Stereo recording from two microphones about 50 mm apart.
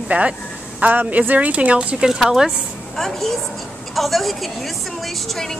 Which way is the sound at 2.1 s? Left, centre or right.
Centre.